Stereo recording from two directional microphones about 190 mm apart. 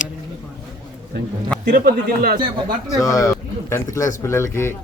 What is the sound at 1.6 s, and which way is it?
A man's voice, 50° right (ahead or behind).